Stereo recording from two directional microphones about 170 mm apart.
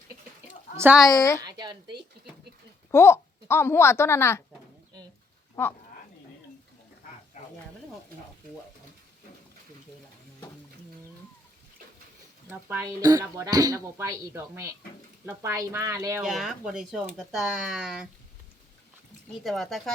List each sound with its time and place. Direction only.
1.0 s a woman's voice: 20° left (ahead or behind)
1.5 s a sound: 25° right (ahead or behind)
2.9 s a woman's voice: 15° left (ahead or behind)
5.6 s speech: 10° left (ahead or behind)
12.5 s speech: 15° right (ahead or behind)
16.2 s speech: centre (ahead or behind)
19.4 s speech: centre (ahead or behind)